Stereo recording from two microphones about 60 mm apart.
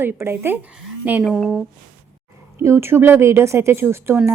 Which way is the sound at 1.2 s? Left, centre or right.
Centre.